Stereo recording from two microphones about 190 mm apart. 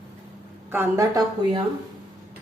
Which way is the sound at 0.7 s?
15° right (ahead or behind).